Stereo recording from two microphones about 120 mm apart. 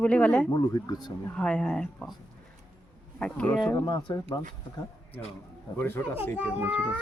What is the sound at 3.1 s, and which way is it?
Speech, 10° left (ahead or behind).